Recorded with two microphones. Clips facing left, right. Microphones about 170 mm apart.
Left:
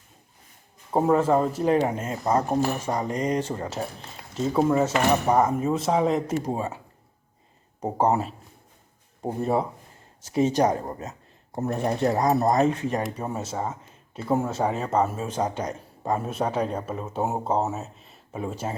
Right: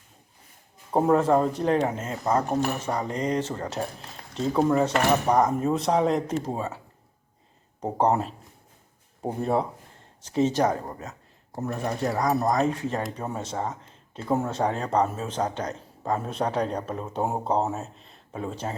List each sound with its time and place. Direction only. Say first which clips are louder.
0.9 s speech: even; centre (ahead or behind)
7.8 s speech: even; 5° left (ahead or behind)
13.0 s speech: left 2 dB; 10° left (ahead or behind)